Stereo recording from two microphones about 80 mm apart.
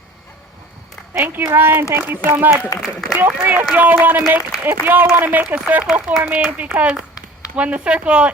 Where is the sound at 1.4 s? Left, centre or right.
Right.